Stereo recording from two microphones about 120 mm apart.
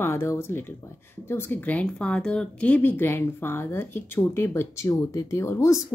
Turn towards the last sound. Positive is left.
turn(degrees=20)  # may be behind; listen again after turning